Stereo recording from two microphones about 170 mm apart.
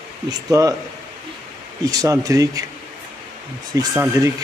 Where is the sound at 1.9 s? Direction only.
20° right (ahead or behind).